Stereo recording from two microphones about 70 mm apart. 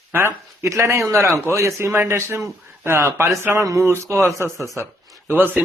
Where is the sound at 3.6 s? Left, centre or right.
Right.